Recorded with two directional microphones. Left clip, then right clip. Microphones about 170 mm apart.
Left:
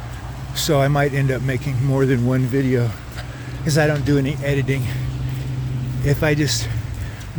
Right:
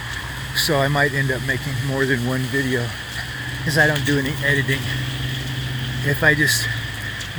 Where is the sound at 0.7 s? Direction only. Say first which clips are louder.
Left 2 dB; 35° left (ahead or behind).